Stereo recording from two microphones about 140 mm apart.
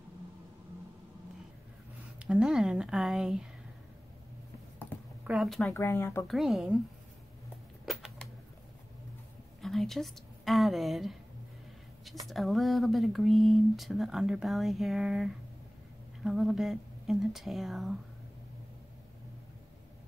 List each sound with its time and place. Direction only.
2.1 s speech: 5° right (ahead or behind)
5.2 s speech: centre (ahead or behind)
5.7 s speech: 20° left (ahead or behind)
6.2 s speech: centre (ahead or behind)
7.8 s typewriter: centre (ahead or behind)
9.6 s a woman's voice: centre (ahead or behind)